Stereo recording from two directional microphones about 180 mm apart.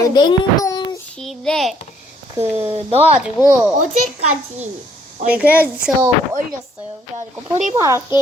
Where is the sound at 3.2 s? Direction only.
10° right (ahead or behind).